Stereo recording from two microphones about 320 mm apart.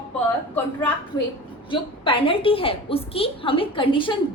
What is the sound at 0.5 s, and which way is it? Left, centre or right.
A woman's voice, centre.